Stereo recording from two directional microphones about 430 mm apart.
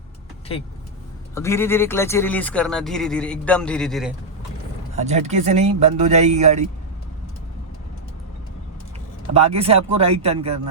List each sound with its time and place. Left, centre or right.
1.4 s speech: centre
4.9 s speech: centre
9.3 s speech: centre